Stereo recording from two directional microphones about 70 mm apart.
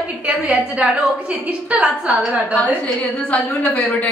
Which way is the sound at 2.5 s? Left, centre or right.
Left.